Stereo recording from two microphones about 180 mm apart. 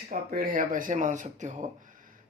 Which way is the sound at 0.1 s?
55° right (ahead or behind).